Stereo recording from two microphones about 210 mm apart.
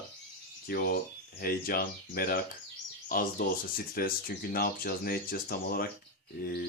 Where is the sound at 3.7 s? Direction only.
45° left (ahead or behind).